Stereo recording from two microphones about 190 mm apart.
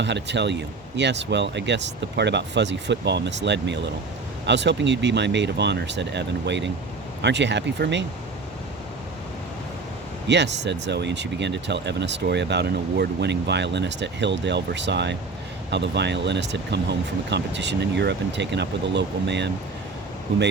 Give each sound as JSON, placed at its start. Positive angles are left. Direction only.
{"t": 0.0, "sound": "speech", "side_deg": -65}
{"t": 10.2, "sound": "speech", "side_deg": -65}